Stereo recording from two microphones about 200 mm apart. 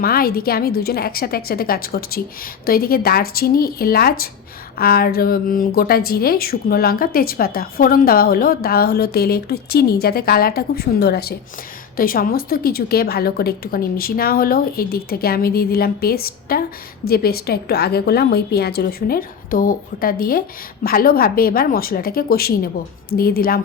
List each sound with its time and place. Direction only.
0.0 s speech: 50° left (ahead or behind)